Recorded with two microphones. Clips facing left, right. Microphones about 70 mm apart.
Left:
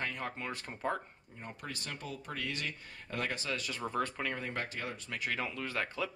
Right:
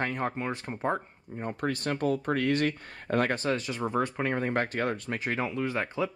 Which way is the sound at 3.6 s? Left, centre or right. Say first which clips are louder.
Right 6 dB; right.